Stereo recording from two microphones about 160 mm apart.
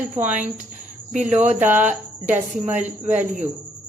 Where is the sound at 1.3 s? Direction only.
45° right (ahead or behind).